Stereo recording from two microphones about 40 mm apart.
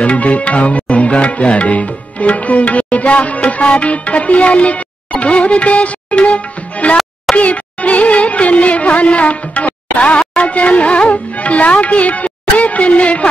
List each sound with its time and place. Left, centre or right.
0.0 s music: left